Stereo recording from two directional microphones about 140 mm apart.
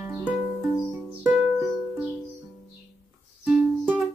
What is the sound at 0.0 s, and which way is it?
Music, 15° right (ahead or behind).